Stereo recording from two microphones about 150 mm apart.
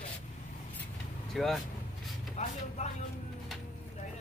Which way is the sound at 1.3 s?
Centre (ahead or behind).